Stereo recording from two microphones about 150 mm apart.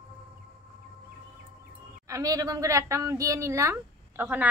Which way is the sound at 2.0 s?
25° right (ahead or behind).